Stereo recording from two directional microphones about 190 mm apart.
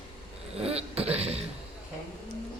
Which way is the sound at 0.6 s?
30° right (ahead or behind).